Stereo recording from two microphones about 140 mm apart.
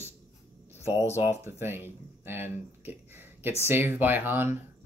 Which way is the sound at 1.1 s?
15° right (ahead or behind).